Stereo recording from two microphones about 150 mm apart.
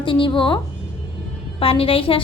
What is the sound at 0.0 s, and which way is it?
A woman's voice, 35° left (ahead or behind).